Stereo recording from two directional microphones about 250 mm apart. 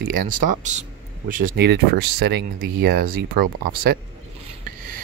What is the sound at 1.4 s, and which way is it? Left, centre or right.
Speech, right.